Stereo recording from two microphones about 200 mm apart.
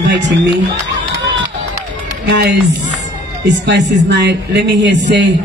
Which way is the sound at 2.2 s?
60° right (ahead or behind).